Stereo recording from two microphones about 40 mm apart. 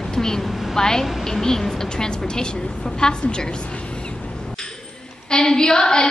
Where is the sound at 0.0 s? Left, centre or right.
Centre.